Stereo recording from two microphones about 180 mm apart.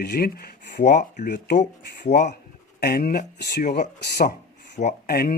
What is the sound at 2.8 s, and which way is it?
Speech, 55° left (ahead or behind).